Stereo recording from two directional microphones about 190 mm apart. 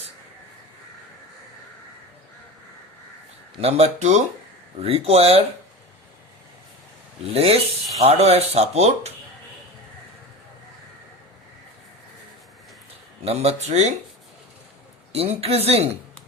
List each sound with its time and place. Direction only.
3.6 s speech: 30° right (ahead or behind)
7.3 s speech: 30° right (ahead or behind)
13.2 s speech: 35° right (ahead or behind)
15.1 s speech: 30° right (ahead or behind)